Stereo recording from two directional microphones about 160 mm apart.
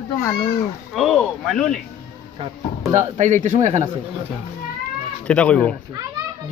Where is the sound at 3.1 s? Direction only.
50° right (ahead or behind).